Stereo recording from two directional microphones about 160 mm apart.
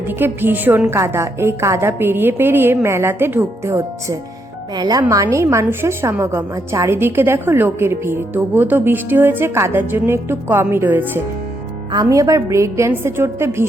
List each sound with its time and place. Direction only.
0.2 s a woman's voice: 10° right (ahead or behind)
11.9 s a woman's voice: 25° right (ahead or behind)